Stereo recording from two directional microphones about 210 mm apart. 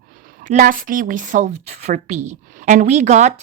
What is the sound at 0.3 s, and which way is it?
Speech, 40° right (ahead or behind).